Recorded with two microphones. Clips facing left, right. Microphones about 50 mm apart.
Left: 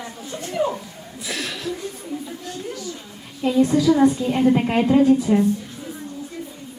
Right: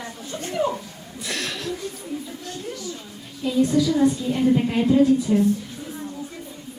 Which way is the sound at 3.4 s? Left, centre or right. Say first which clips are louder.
Left 2 dB; left.